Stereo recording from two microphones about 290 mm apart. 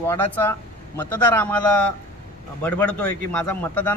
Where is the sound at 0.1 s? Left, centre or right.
Centre.